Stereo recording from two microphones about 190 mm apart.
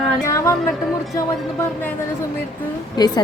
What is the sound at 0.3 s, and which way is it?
Music, 15° left (ahead or behind).